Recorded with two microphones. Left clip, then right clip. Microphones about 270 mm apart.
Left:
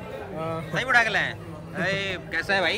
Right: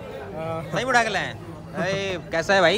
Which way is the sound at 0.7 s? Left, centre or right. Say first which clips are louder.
Even; centre.